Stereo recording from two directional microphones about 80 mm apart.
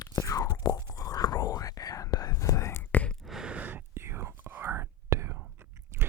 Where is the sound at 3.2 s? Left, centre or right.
Centre.